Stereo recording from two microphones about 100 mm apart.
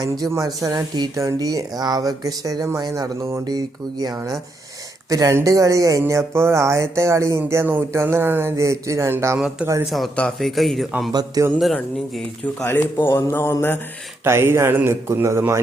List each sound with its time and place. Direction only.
0.0 s speech: 35° right (ahead or behind)
9.8 s speech: centre (ahead or behind)
11.1 s speech: 40° right (ahead or behind)
11.6 s speech: centre (ahead or behind)
12.6 s speech: 20° left (ahead or behind)
14.3 s speech: 25° right (ahead or behind)